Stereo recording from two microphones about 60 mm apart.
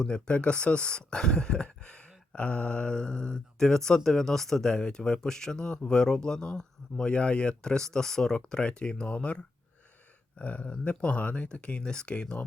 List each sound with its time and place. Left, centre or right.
0.0 s speech: centre